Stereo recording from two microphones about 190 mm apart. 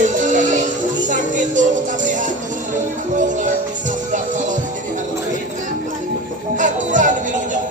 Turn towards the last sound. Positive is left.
turn(degrees=-40)  # may be behind; listen again after turning